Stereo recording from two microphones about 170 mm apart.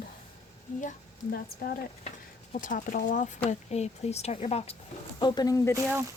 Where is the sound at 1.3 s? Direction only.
60° left (ahead or behind); by 4.8 s 35° left (ahead or behind).